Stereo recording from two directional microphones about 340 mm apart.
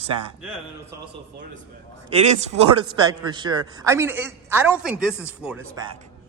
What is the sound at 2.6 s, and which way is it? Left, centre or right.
A man's voice, centre.